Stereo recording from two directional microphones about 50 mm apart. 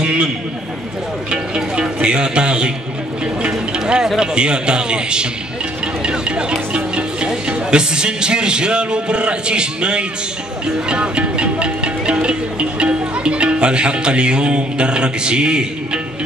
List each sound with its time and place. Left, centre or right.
1.3 s speech: centre
3.4 s a sound: centre
4.2 s a man's voice: centre
6.0 s music: centre
6.7 s speech: centre